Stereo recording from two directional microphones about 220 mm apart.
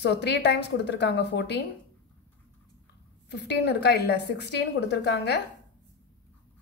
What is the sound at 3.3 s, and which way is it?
A woman's voice, 50° left (ahead or behind).